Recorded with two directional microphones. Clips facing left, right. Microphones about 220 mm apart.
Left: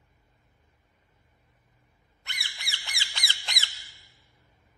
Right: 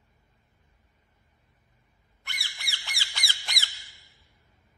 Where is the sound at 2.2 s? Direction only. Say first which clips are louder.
Even; 20° left (ahead or behind).